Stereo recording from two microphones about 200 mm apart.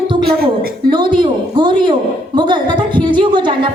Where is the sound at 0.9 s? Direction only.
25° right (ahead or behind).